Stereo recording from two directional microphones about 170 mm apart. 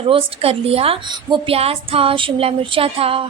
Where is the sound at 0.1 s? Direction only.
35° right (ahead or behind).